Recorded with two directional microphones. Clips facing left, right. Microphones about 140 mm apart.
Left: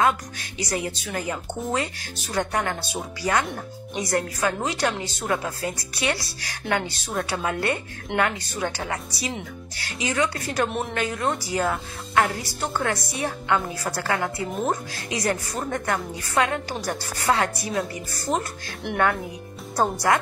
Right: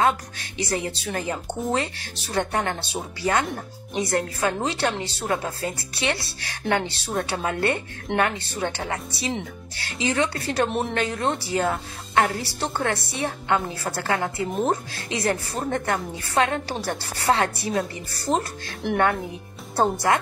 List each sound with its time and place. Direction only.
0.6 s a woman's voice: 25° right (ahead or behind)